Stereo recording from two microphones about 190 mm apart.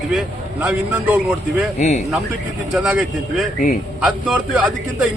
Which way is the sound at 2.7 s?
5° right (ahead or behind).